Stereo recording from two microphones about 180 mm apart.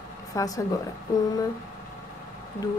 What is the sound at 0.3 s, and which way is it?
Speech, 20° left (ahead or behind).